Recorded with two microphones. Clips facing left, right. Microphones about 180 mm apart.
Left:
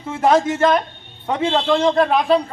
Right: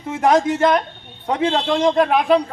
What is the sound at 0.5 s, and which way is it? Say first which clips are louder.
A man's voice: even; 10° right (ahead or behind).